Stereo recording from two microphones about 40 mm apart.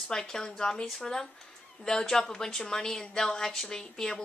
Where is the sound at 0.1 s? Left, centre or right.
Centre.